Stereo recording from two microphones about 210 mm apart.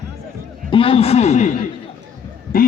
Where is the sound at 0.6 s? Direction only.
25° left (ahead or behind).